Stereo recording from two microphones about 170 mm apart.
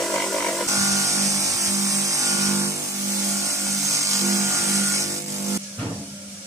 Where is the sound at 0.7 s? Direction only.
20° right (ahead or behind).